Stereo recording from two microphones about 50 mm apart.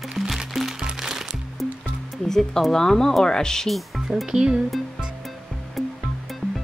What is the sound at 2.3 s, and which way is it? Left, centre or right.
Speech, centre.